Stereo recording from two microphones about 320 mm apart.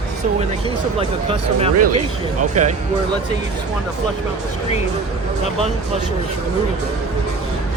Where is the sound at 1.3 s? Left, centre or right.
Centre.